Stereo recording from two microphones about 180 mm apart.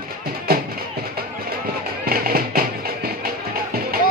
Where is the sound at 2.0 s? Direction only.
55° right (ahead or behind).